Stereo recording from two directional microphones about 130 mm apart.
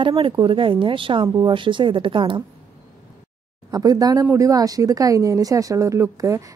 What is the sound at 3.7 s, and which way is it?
Speech, 30° right (ahead or behind).